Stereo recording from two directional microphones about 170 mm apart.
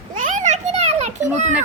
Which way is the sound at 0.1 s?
50° right (ahead or behind).